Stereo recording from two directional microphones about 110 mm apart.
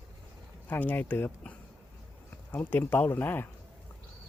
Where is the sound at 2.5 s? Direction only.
15° left (ahead or behind).